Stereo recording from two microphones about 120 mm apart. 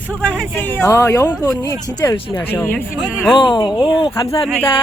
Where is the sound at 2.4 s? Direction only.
15° left (ahead or behind).